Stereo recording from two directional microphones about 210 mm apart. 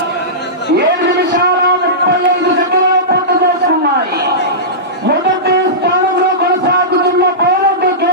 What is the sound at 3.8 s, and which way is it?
Chatter, 50° right (ahead or behind).